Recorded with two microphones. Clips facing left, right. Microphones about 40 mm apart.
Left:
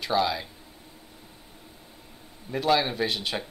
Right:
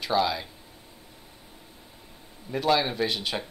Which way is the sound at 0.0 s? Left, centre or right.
Centre.